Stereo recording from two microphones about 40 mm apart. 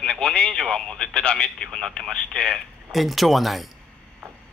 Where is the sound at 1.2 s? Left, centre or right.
Left.